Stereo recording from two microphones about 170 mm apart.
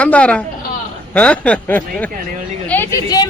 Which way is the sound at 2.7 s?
10° left (ahead or behind).